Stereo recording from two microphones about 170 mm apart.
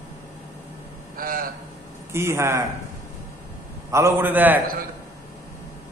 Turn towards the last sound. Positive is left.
turn(degrees=-10)  # may be behind; listen again after turning